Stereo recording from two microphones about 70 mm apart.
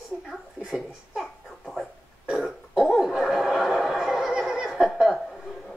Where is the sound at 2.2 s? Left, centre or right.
Centre.